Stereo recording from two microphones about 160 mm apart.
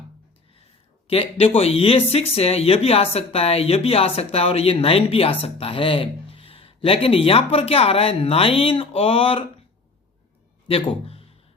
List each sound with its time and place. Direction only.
1.0 s speech: 35° left (ahead or behind)
10.7 s a man's voice: 35° left (ahead or behind)